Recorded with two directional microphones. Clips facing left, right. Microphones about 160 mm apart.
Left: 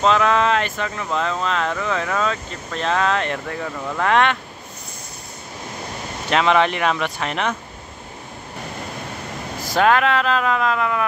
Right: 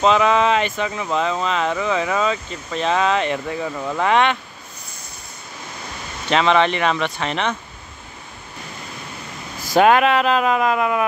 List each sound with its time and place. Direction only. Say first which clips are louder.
0.0 s speech: right 1 dB; 5° right (ahead or behind)
6.2 s speech: right 1 dB; 5° left (ahead or behind)
9.8 s speech: right 3 dB; 15° right (ahead or behind)